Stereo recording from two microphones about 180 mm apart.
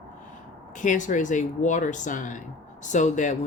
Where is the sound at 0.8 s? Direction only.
45° left (ahead or behind).